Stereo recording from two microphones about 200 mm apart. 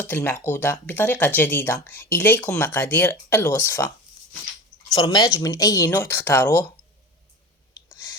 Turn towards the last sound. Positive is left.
turn(degrees=10)  # may be behind; listen again after turning